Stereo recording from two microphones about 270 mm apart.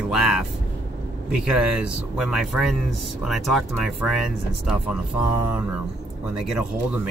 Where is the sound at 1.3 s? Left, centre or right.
Centre.